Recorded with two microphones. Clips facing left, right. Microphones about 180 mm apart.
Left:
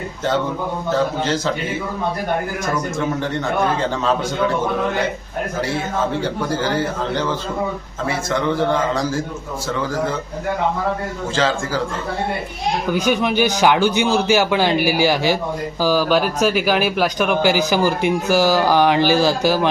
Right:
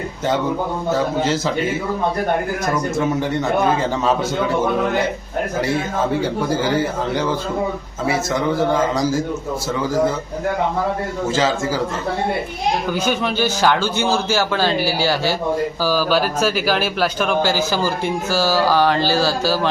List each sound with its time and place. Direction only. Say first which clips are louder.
0.9 s a man's voice: even; 10° right (ahead or behind)
6.2 s a man's voice: right 2 dB; 10° right (ahead or behind)
8.5 s a man's voice: right 1 dB; 10° right (ahead or behind)
11.3 s a man's voice: even; 10° right (ahead or behind)
12.9 s speech: left 2 dB; 10° left (ahead or behind)